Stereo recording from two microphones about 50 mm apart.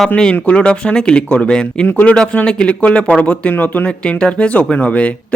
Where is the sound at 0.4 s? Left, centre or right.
Left.